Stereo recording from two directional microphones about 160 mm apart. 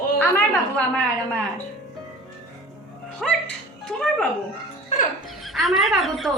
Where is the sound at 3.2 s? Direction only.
Centre (ahead or behind).